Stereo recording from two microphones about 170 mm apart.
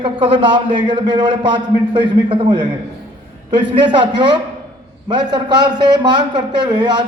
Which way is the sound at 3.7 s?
30° right (ahead or behind).